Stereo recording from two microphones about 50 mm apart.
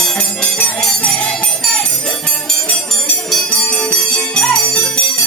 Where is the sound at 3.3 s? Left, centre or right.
Centre.